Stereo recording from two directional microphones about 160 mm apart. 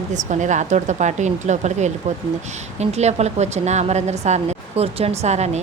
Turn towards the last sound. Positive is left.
turn(degrees=-45)  # may be behind; listen again after turning